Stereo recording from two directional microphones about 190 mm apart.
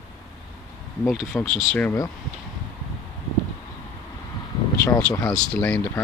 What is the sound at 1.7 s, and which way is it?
Speech, 15° left (ahead or behind).